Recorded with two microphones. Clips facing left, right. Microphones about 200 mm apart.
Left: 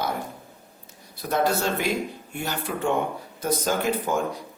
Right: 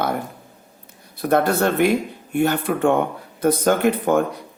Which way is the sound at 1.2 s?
60° right (ahead or behind).